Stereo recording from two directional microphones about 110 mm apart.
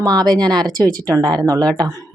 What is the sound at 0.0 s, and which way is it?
Speech, 40° right (ahead or behind).